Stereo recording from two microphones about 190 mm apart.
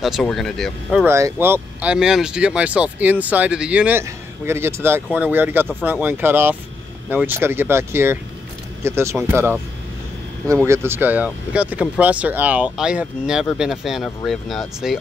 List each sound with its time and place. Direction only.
0.0 s speech: centre (ahead or behind)
1.0 s speech: 15° right (ahead or behind)